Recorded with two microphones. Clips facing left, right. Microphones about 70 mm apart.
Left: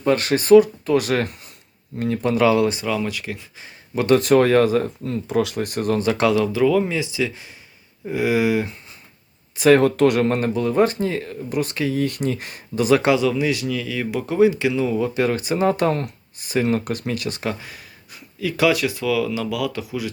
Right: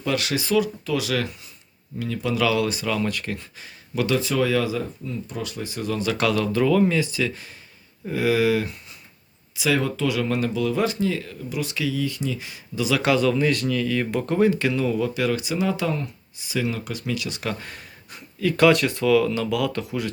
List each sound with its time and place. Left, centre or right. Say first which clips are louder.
0.0 s speech: left 6 dB; left
2.8 s speech: left 1 dB; centre
4.2 s speech: left 7 dB; left
5.0 s speech: left 9 dB; left
5.5 s speech: left 6 dB; left
5.9 s speech: left 4 dB; left
6.4 s speech: left 1 dB; centre
9.6 s speech: left 9 dB; left
10.2 s speech: left 3 dB; left
12.0 s speech: left 4 dB; left
13.0 s speech: left 2 dB; left
13.2 s speech: even; centre
15.1 s speech: left 3 dB; left
17.6 s speech: even; centre